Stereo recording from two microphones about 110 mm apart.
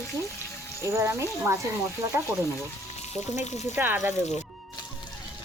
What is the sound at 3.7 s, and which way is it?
Frying, 20° right (ahead or behind).